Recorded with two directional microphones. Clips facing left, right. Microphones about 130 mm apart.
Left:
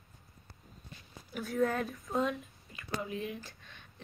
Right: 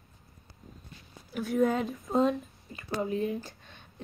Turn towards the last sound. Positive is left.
turn(degrees=-35)  # may be behind; listen again after turning